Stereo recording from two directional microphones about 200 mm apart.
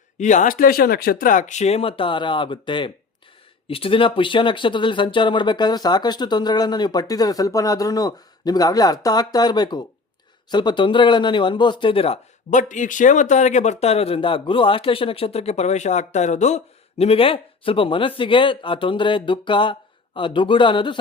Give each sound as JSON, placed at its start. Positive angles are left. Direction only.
{"t": 0.2, "sound": "speech", "side_deg": 35}